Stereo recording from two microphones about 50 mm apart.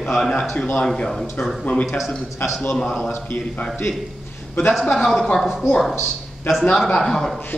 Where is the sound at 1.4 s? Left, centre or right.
Left.